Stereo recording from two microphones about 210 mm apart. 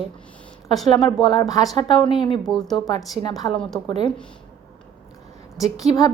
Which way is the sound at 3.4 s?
20° left (ahead or behind).